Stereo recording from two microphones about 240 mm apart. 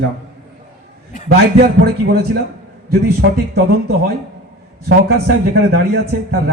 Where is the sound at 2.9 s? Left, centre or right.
Right.